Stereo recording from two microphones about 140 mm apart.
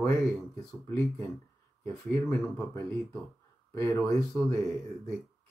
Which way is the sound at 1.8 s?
15° left (ahead or behind).